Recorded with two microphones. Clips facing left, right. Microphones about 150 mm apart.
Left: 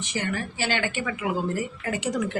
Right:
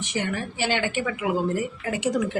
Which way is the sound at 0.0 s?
15° right (ahead or behind).